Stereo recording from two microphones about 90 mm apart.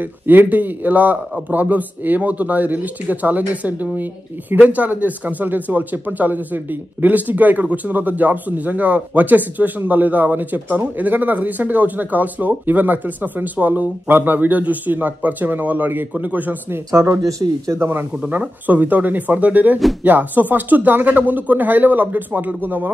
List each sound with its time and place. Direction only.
0.0 s speech: 20° right (ahead or behind)
16.9 s speech: 35° right (ahead or behind)